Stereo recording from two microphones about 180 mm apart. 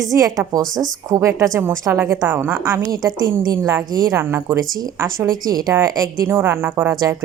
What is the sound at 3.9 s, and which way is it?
Speech, 55° right (ahead or behind).